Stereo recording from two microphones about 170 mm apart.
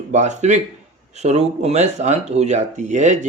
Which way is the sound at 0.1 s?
45° right (ahead or behind).